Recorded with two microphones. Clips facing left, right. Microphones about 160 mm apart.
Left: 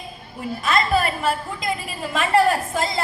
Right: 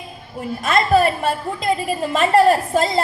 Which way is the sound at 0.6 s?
50° right (ahead or behind).